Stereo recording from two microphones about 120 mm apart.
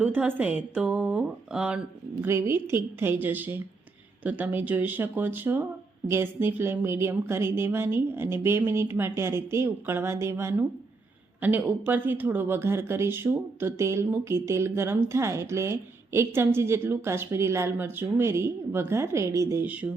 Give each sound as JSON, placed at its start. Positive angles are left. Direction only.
{"t": 0.0, "sound": "speech", "side_deg": -15}
{"t": 2.2, "sound": "speech", "side_deg": -20}
{"t": 19.6, "sound": "speech", "side_deg": -10}